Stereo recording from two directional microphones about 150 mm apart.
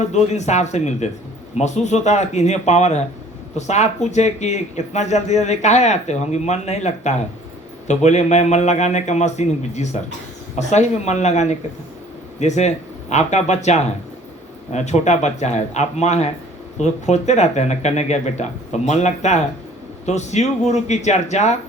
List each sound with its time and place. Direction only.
0.0 s speech: 50° left (ahead or behind)